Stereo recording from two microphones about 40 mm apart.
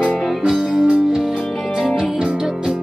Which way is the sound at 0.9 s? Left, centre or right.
Centre.